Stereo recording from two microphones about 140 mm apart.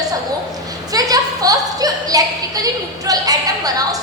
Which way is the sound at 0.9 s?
25° right (ahead or behind).